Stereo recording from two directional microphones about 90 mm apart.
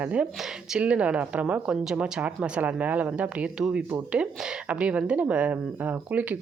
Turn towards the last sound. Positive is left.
turn(degrees=-15)  # may be behind; listen again after turning